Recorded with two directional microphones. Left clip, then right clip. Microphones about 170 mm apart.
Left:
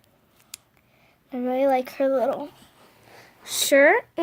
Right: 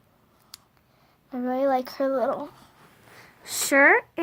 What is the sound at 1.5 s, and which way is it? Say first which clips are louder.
Speech: left 2 dB; 50° left (ahead or behind).